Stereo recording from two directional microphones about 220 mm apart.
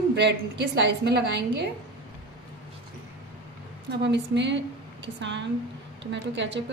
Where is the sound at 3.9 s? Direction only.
55° right (ahead or behind).